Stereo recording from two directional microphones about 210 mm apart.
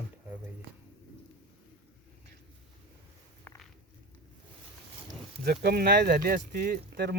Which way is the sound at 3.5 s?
10° left (ahead or behind).